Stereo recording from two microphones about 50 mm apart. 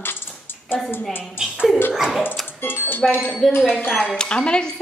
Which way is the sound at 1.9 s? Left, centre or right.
Centre.